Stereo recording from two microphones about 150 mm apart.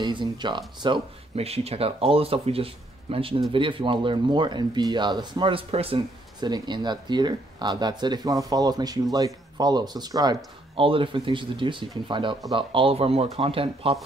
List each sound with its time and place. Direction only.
0.0 s speech: 30° right (ahead or behind)